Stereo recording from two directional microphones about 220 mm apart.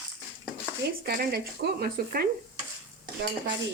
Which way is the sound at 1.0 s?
45° right (ahead or behind).